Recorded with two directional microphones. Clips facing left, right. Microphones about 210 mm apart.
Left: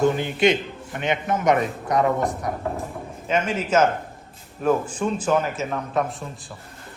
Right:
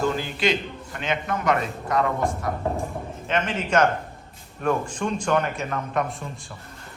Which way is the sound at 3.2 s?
10° left (ahead or behind).